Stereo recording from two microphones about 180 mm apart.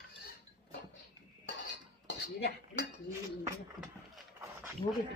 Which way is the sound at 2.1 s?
75° left (ahead or behind).